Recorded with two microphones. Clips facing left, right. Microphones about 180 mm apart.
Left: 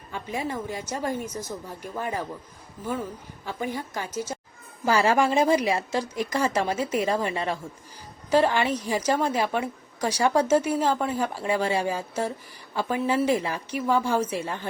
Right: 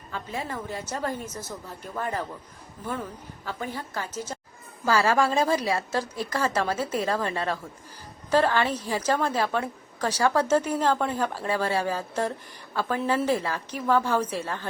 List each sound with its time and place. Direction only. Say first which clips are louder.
0.1 s a woman's voice: left 3 dB; 15° left (ahead or behind)